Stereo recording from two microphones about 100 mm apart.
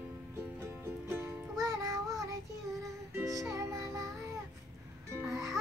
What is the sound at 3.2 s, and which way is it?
Music, 30° right (ahead or behind).